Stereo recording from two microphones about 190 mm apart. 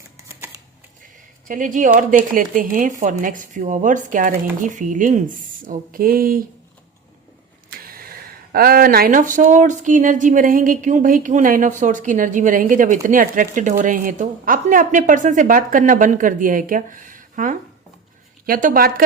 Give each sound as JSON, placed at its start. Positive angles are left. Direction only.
{"t": 1.5, "sound": "speech", "side_deg": -45}
{"t": 7.7, "sound": "speech", "side_deg": -50}